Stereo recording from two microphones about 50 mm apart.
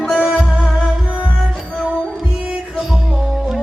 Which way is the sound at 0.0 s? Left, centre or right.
Centre.